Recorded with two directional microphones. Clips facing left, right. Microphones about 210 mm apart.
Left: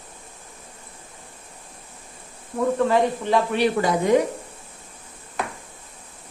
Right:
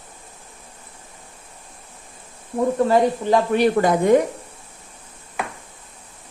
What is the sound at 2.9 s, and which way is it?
Speech, 45° right (ahead or behind).